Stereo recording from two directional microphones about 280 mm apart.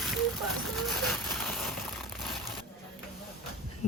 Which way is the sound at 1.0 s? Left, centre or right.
Centre.